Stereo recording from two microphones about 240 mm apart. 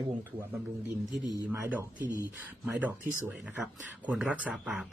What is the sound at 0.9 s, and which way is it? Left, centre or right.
Speech, centre.